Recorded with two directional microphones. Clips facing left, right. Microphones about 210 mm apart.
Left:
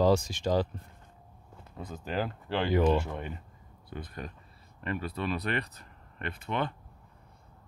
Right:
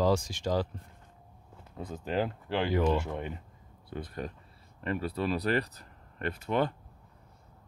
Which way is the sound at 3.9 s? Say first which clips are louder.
Right 3 dB; 30° right (ahead or behind).